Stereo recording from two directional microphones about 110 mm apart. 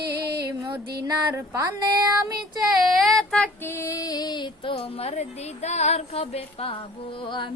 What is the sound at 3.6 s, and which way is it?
Music, 25° left (ahead or behind).